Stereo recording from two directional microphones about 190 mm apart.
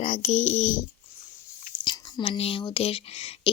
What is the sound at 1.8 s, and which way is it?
Speech, 30° left (ahead or behind).